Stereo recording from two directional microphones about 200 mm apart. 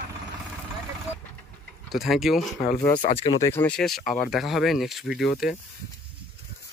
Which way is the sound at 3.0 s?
40° left (ahead or behind).